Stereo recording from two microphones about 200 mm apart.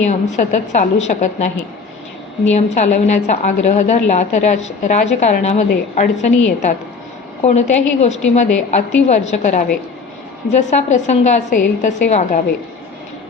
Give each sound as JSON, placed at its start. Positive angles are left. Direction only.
{"t": 0.0, "sound": "a woman's voice", "side_deg": 35}
{"t": 2.5, "sound": "a woman's voice", "side_deg": 35}
{"t": 8.0, "sound": "a woman's voice", "side_deg": 35}